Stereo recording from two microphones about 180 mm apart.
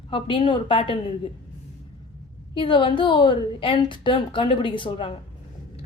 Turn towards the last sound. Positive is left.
turn(degrees=25)  # may be behind; listen again after turning